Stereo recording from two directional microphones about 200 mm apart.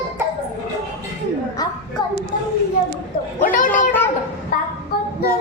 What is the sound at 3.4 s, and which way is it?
Speech, 40° left (ahead or behind).